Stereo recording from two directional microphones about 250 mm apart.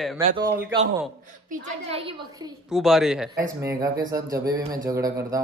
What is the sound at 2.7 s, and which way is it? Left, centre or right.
Speech, centre.